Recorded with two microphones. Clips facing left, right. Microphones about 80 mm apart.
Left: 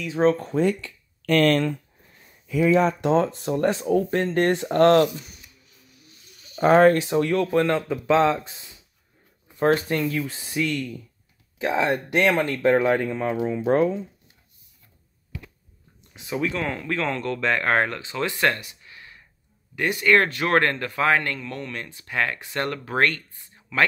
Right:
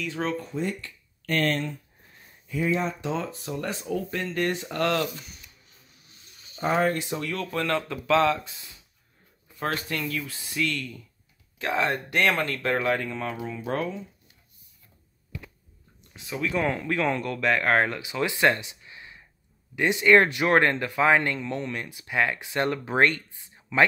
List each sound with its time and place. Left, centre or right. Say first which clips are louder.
0.2 s speech: left 11 dB; left
0.5 s speech: left 8 dB; left
3.0 s speech: left 9 dB; left
6.5 s speech: left 9 dB; left
7.5 s speech: left 6 dB; left
10.6 s speech: left 3 dB; centre
16.5 s speech: right 1 dB; centre